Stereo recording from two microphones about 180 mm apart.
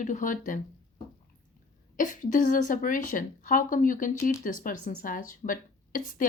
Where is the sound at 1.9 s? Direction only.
45° left (ahead or behind).